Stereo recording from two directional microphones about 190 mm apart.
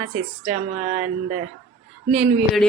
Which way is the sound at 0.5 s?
40° right (ahead or behind).